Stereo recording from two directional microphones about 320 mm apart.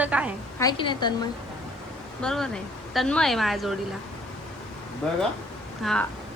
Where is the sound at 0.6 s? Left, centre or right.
Centre.